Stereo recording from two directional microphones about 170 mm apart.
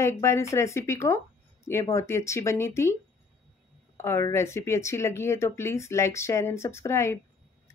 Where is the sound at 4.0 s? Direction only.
15° left (ahead or behind).